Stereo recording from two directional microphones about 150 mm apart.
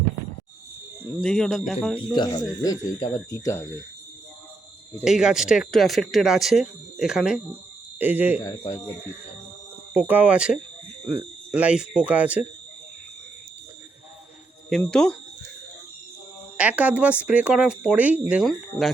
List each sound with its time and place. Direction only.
1.2 s speech: 5° left (ahead or behind)
2.1 s speech: 30° left (ahead or behind)
5.0 s speech: 5° right (ahead or behind)
8.4 s speech: 25° left (ahead or behind)
9.9 s speech: 10° right (ahead or behind)
14.7 s speech: 5° left (ahead or behind)
16.6 s speech: 10° right (ahead or behind)